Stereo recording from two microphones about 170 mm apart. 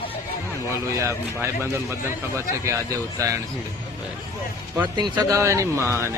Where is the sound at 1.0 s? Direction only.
15° right (ahead or behind).